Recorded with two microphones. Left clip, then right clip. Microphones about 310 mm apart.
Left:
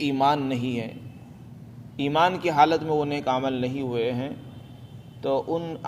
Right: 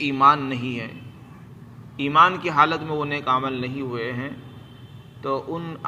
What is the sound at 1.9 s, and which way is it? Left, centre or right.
Speech, left.